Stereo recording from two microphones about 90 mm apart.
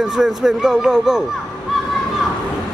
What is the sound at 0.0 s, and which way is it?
Speech, 5° right (ahead or behind).